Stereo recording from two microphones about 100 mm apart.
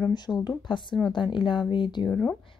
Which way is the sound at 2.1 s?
10° left (ahead or behind).